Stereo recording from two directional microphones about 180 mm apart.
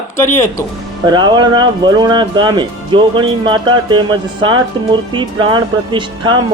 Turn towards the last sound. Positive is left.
turn(degrees=-25)  # may be behind; listen again after turning